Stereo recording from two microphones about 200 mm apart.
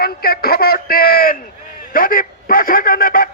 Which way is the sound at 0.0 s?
50° left (ahead or behind).